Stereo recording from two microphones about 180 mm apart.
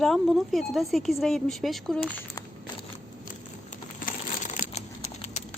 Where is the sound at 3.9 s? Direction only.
50° left (ahead or behind).